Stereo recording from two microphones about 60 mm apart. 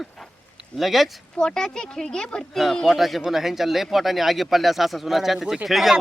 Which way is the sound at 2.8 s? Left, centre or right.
Centre.